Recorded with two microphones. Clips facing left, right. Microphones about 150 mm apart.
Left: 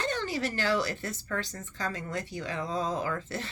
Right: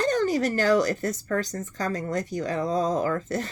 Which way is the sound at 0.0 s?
40° right (ahead or behind).